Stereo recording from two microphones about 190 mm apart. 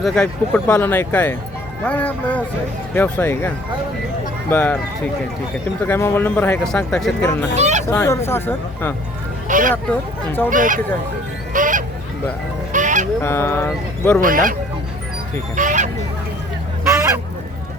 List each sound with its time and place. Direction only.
0.0 s speech: 5° left (ahead or behind)
5.8 s speech: 10° left (ahead or behind)
7.5 s speech: 35° right (ahead or behind)
7.9 s speech: 15° left (ahead or behind)
9.5 s speech: 45° right (ahead or behind)
9.9 s speech: 10° left (ahead or behind)
10.5 s speech: 45° right (ahead or behind)
11.5 s goose: 45° right (ahead or behind)
12.7 s fowl: 40° right (ahead or behind)
13.2 s speech: 15° left (ahead or behind)
14.2 s speech: 45° right (ahead or behind)
15.5 s a sound: 40° right (ahead or behind)
16.8 s a sound: 15° right (ahead or behind)